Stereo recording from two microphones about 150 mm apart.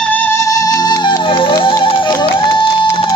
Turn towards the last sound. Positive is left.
turn(degrees=30)  # may be behind; listen again after turning